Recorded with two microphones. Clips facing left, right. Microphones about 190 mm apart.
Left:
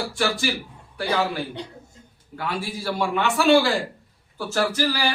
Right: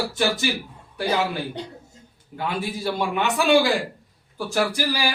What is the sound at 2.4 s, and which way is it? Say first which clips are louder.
A man's voice: right 2 dB; 20° right (ahead or behind).